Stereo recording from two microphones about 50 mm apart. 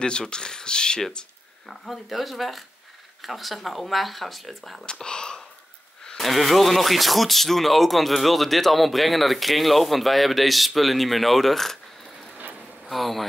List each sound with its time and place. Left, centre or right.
0.0 s speech: centre
1.7 s speech: centre
4.8 s whispering: centre
6.0 s speech: centre